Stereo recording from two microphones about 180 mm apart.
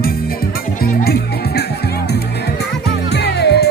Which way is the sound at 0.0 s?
55° left (ahead or behind).